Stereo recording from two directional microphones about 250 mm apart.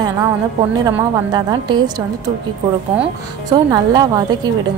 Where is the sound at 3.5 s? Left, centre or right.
Centre.